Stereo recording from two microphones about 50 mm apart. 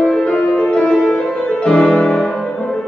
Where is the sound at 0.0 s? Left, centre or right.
Centre.